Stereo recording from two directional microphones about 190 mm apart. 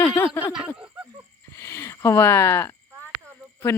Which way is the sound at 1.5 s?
15° left (ahead or behind).